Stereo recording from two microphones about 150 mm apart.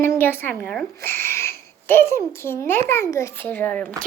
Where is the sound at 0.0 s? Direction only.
15° left (ahead or behind).